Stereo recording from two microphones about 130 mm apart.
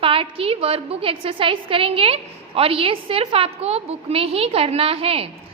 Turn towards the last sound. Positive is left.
turn(degrees=-45)  # may be behind; listen again after turning